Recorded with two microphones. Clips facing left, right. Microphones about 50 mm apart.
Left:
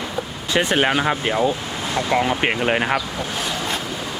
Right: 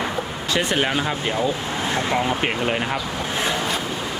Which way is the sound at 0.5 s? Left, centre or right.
Left.